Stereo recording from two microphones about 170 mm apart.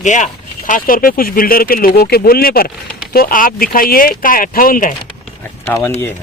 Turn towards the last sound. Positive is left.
turn(degrees=10)  # may be behind; listen again after turning